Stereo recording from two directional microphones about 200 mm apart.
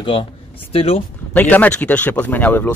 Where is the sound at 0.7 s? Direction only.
30° left (ahead or behind).